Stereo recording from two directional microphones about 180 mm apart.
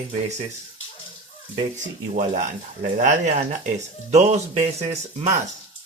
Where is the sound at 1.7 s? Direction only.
45° right (ahead or behind).